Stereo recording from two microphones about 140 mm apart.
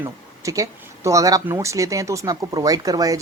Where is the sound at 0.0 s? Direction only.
25° right (ahead or behind).